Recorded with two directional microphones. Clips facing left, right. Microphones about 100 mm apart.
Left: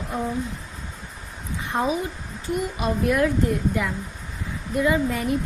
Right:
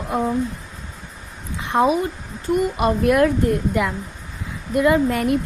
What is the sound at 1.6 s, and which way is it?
Speech, 90° right.